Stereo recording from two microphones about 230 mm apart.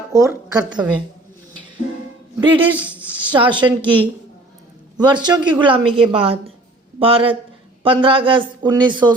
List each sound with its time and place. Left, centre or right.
0.1 s a woman's voice: centre
2.4 s a woman's voice: right
2.7 s speech: centre
3.2 s a woman's voice: right
4.9 s a woman's voice: centre